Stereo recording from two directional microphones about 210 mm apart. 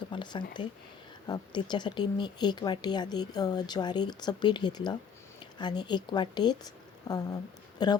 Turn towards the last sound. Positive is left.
turn(degrees=20)  # may be behind; listen again after turning